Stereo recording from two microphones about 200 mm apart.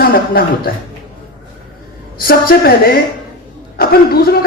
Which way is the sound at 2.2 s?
50° left (ahead or behind).